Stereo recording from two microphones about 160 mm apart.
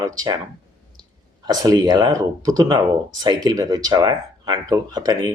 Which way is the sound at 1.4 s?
25° right (ahead or behind).